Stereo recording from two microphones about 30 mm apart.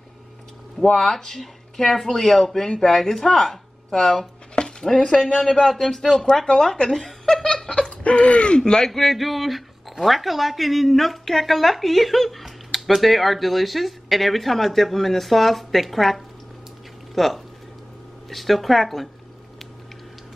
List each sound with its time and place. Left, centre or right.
0.9 s speech: centre
6.6 s speech: centre
6.9 s chuckle: centre
7.4 s a sound: centre
8.0 s a sound: left
8.5 s speech: left
8.8 s speech: centre